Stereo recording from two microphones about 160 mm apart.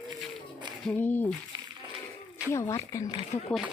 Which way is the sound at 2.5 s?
20° left (ahead or behind).